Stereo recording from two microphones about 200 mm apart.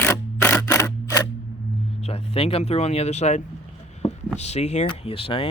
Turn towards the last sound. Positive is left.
turn(degrees=30)  # may be behind; listen again after turning